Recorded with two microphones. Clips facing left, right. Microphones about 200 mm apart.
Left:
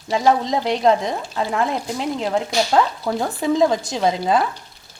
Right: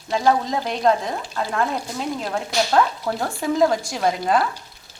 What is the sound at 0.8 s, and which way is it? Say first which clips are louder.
Speech: even; 15° left (ahead or behind).